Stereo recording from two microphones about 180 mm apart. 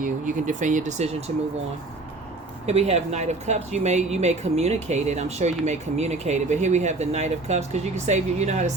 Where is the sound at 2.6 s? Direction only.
35° right (ahead or behind).